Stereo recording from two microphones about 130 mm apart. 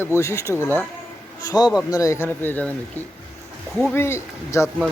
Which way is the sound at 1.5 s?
30° left (ahead or behind).